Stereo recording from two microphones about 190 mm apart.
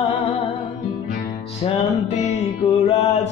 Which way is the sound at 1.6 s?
35° left (ahead or behind).